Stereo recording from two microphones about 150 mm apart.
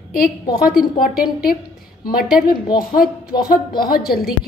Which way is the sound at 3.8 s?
90° left.